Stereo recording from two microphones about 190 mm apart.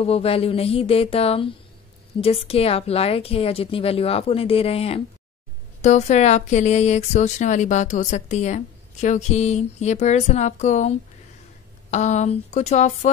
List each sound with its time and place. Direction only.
0.0 s speech: 30° left (ahead or behind)